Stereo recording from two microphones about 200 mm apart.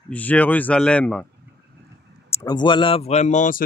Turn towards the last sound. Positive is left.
turn(degrees=40)  # may be behind; listen again after turning